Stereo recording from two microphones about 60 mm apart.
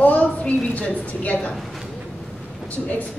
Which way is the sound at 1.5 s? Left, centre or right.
Centre.